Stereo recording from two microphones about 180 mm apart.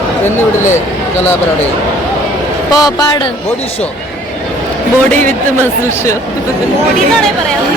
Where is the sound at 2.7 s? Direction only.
20° left (ahead or behind).